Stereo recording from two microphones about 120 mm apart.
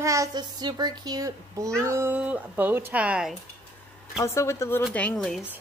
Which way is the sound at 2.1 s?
10° right (ahead or behind).